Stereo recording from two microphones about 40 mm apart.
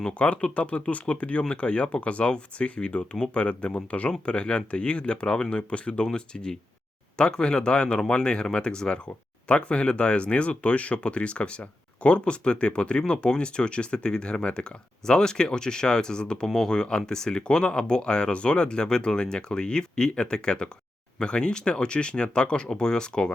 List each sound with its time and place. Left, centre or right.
0.1 s speech: left